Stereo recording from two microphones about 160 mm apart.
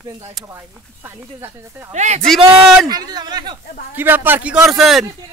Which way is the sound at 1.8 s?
45° right (ahead or behind).